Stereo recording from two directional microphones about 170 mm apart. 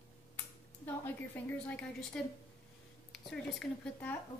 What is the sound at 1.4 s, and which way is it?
Speech, 10° left (ahead or behind).